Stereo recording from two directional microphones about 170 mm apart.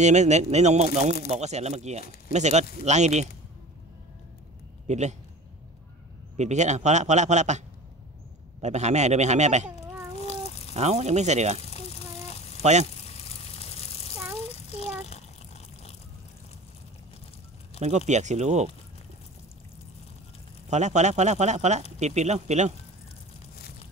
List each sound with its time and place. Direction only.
0.0 s a man's voice: 40° right (ahead or behind)
4.8 s a man's voice: 40° right (ahead or behind)
6.3 s a man's voice: 40° right (ahead or behind)
10.1 s a sound: 40° left (ahead or behind)
10.7 s a man's voice: 40° right (ahead or behind)
11.7 s a sound: 35° left (ahead or behind)
17.7 s a man's voice: 40° right (ahead or behind)
20.7 s a man's voice: 45° right (ahead or behind)